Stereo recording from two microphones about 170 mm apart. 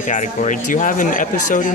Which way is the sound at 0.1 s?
50° left (ahead or behind).